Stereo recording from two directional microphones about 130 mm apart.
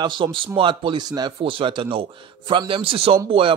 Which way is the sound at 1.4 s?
40° right (ahead or behind).